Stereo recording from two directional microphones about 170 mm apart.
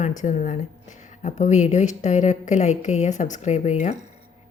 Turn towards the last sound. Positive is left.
turn(degrees=40)  # may be behind; listen again after turning